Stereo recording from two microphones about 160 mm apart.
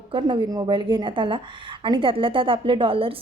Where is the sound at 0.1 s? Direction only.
30° right (ahead or behind).